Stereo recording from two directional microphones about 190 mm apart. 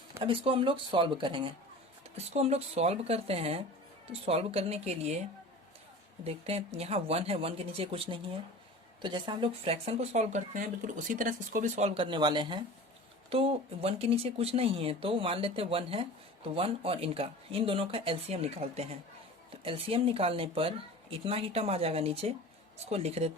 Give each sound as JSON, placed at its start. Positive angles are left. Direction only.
{"t": 0.2, "sound": "speech", "side_deg": -30}
{"t": 6.2, "sound": "speech", "side_deg": -30}